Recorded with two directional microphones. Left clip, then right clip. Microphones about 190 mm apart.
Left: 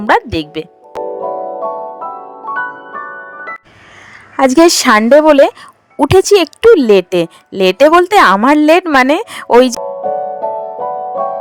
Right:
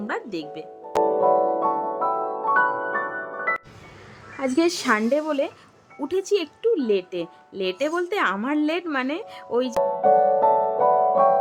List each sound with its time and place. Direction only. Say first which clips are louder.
0.1 s a woman's voice: left 19 dB; 45° left (ahead or behind)
0.9 s music: right 1 dB; 5° left (ahead or behind)
4.4 s a woman's voice: left 15 dB; 50° left (ahead or behind)
10.0 s music: right 1 dB; 10° left (ahead or behind)